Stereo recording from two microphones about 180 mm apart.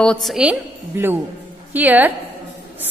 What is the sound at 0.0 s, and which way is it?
A woman's voice, 5° left (ahead or behind).